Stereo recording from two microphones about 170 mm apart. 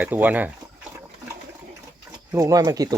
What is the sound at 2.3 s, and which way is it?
Speech, 20° right (ahead or behind).